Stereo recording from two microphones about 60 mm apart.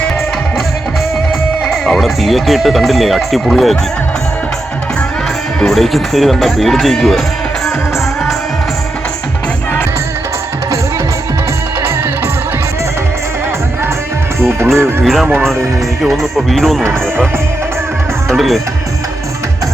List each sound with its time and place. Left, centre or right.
1.6 s speech: centre
5.5 s speech: centre
14.3 s music: right
15.0 s speech: centre
18.3 s speech: centre